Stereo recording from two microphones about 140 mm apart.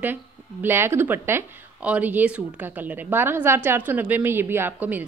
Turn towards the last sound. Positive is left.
turn(degrees=-15)  # may be behind; listen again after turning